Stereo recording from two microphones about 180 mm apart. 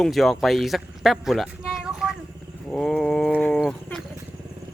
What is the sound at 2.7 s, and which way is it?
Roaring cats, 5° left (ahead or behind).